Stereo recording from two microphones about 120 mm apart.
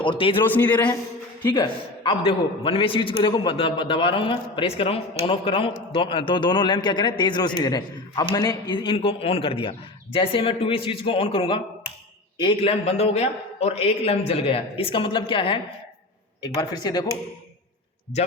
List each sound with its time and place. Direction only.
0.0 s a man's voice: 45° left (ahead or behind)
0.5 s a man's voice: 15° left (ahead or behind)
1.5 s a man's voice: 45° left (ahead or behind)
12.8 s a man's voice: 60° left (ahead or behind)
16.4 s a man's voice: 35° left (ahead or behind)